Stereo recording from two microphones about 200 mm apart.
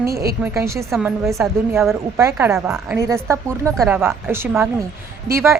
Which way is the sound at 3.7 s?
Centre (ahead or behind).